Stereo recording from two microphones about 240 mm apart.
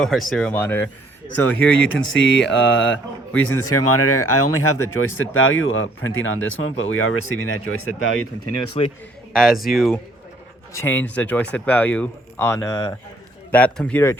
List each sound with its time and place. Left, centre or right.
0.0 s speech: centre
1.9 s speech: left
8.8 s a man's voice: left
9.3 s speech: centre